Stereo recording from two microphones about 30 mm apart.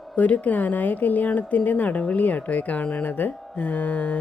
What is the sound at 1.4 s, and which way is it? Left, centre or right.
Speech, left.